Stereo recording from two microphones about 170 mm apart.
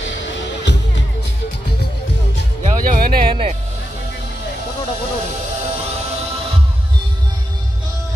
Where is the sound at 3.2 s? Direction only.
35° right (ahead or behind).